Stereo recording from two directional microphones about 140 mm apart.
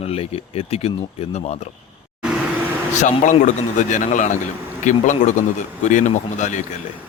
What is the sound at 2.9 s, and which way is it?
A man's voice, 65° left (ahead or behind).